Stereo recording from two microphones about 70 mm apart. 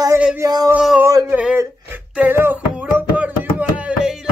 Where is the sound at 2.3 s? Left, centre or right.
Right.